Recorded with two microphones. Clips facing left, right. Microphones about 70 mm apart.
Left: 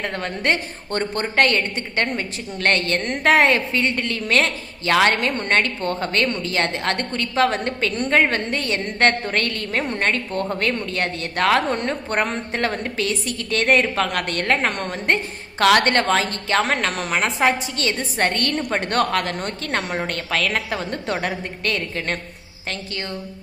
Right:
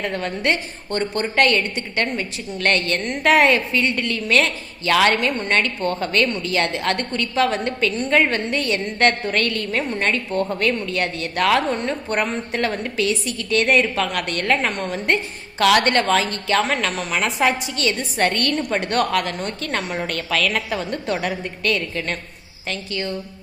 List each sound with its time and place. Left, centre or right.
0.0 s a woman's voice: left
11.7 s a woman's voice: left
12.0 s a woman's voice: left